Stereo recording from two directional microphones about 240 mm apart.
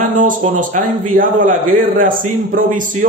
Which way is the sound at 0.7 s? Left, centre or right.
Right.